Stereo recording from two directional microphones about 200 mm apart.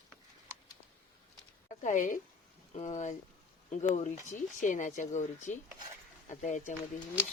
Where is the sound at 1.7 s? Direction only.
40° left (ahead or behind).